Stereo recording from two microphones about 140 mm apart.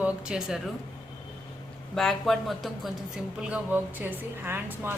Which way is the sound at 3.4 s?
10° right (ahead or behind).